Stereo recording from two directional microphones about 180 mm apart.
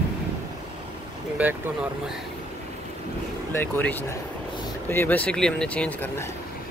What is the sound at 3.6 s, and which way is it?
Speech, 10° left (ahead or behind).